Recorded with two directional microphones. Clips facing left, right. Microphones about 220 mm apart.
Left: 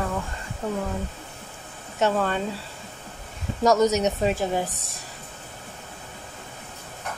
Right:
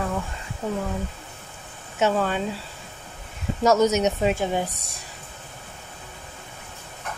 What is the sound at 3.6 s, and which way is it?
Speech, centre (ahead or behind).